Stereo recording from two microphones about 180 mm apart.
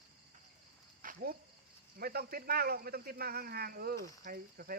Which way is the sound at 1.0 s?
55° right (ahead or behind).